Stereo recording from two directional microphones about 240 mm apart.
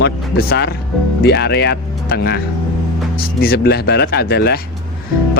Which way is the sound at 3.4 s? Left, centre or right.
Left.